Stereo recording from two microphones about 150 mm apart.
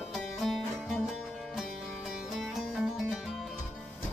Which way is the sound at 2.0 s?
5° right (ahead or behind).